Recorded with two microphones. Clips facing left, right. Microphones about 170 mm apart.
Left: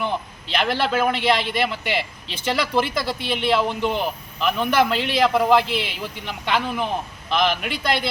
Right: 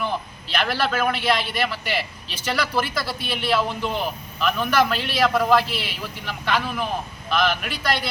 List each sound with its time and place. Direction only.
0.0 s a man's voice: 20° left (ahead or behind)